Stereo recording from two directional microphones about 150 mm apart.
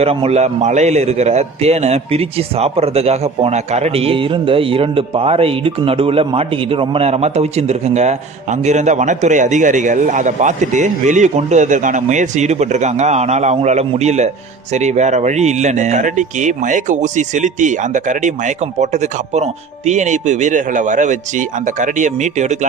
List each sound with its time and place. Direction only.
0.0 s a man's voice: 40° right (ahead or behind)